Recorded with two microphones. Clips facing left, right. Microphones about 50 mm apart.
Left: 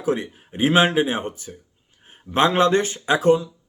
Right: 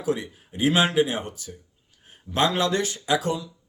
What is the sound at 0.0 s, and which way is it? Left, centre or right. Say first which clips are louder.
Speech: left 3 dB; left.